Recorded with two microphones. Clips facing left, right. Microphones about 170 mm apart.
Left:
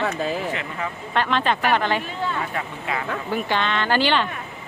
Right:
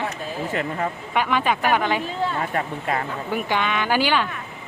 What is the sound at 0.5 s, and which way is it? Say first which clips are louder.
Speech: right 4 dB; 45° right (ahead or behind).